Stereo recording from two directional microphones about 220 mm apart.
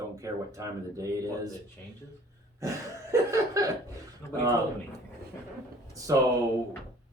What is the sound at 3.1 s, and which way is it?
Speech, 15° right (ahead or behind).